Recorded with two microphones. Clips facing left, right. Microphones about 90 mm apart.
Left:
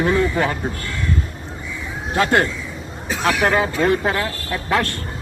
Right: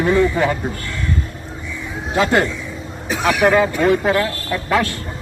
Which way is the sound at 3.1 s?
15° right (ahead or behind).